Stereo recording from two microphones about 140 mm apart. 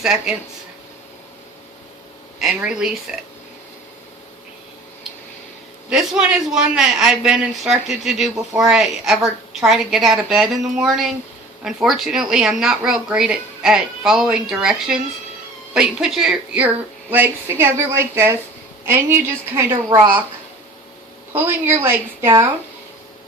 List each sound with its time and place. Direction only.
0.0 s a man's voice: 5° right (ahead or behind)
2.4 s a man's voice: 5° right (ahead or behind)
5.9 s a man's voice: 5° right (ahead or behind)
21.3 s speech: 15° right (ahead or behind)